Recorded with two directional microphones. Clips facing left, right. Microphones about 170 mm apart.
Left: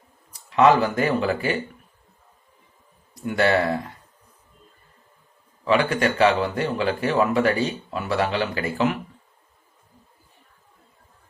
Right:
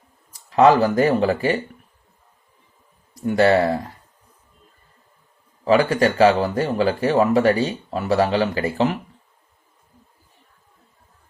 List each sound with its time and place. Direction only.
0.5 s speech: 35° right (ahead or behind)
3.2 s speech: 35° right (ahead or behind)
5.6 s speech: 35° right (ahead or behind)